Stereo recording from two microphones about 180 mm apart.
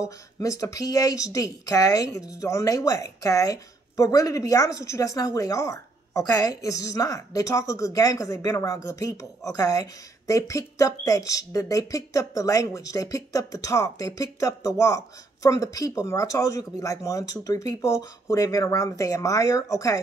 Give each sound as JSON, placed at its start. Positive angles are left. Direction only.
{"t": 0.4, "sound": "speech", "side_deg": 20}